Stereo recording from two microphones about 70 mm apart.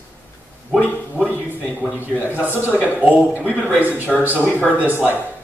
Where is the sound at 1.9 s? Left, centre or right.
Right.